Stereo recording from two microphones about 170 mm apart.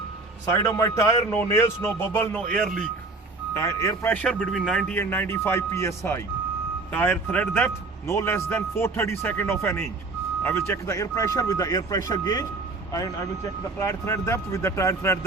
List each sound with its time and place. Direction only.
0.4 s speech: 20° left (ahead or behind); by 2.8 s 5° left (ahead or behind)
3.5 s speech: 15° left (ahead or behind)